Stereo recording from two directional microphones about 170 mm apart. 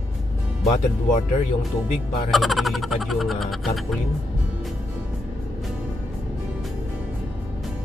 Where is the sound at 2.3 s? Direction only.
Centre (ahead or behind).